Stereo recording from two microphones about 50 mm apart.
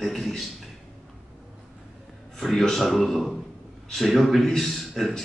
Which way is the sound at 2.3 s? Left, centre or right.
Centre.